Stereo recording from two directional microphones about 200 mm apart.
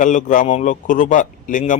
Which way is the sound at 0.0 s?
40° left (ahead or behind).